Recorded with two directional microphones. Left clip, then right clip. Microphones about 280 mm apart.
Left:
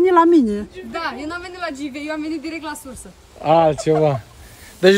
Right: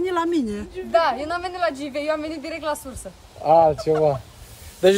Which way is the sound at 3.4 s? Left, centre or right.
Left.